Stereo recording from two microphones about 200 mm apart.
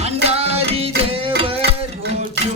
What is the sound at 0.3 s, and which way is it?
Music, 30° right (ahead or behind).